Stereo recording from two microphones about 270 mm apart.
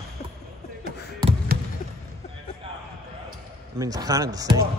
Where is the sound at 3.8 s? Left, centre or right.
Centre.